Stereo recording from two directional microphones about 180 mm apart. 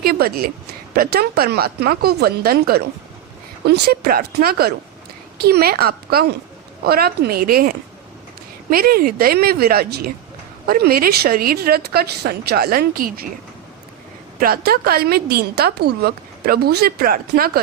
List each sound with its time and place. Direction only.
0.0 s a woman's voice: 60° right (ahead or behind)
8.7 s a woman's voice: 55° right (ahead or behind)
14.3 s a woman's voice: 55° right (ahead or behind)